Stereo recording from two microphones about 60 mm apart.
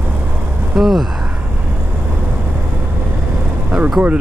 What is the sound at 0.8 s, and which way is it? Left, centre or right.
Speech, centre.